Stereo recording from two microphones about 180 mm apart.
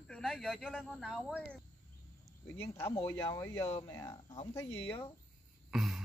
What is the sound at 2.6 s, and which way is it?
Speech, 15° left (ahead or behind).